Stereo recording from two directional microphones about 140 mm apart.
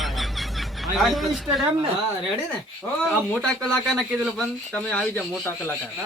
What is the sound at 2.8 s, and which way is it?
Speech, 5° left (ahead or behind).